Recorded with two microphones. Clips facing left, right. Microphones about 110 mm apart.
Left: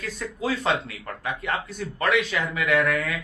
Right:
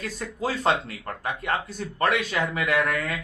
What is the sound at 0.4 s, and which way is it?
Speech, 40° right (ahead or behind).